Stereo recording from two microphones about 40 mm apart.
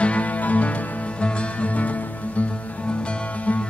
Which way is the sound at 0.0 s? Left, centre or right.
Left.